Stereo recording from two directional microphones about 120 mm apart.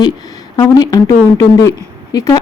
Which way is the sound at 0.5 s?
35° left (ahead or behind).